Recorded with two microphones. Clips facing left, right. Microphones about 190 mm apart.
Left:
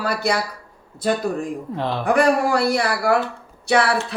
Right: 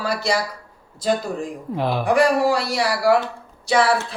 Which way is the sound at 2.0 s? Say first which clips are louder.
Even; 55° left (ahead or behind).